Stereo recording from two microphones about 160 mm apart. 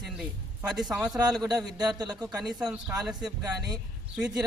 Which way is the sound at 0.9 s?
5° right (ahead or behind).